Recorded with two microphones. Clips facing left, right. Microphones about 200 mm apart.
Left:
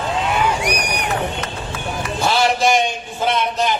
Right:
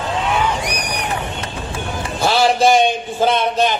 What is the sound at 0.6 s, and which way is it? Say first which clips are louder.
Run: left 2 dB; 10° left (ahead or behind).